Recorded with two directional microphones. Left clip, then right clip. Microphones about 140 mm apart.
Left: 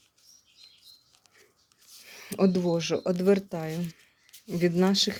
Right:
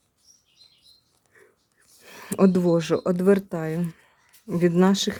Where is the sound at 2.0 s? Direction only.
45° right (ahead or behind).